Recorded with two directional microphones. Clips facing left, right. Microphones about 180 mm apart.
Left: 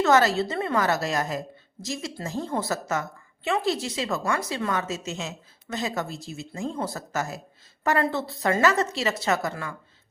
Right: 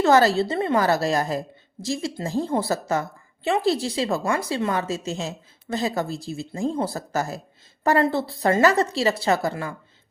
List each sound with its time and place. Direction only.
0.0 s a woman's voice: 35° right (ahead or behind)